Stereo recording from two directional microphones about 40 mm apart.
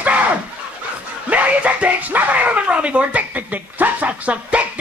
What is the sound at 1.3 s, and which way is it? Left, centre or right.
Music, right.